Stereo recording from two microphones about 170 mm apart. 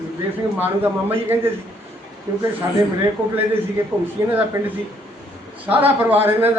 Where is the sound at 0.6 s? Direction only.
10° right (ahead or behind).